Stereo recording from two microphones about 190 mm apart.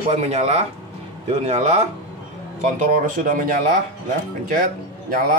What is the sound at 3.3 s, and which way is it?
Speech, 45° right (ahead or behind).